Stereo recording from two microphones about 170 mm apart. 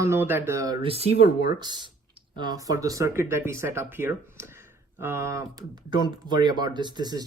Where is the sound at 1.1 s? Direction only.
60° left (ahead or behind).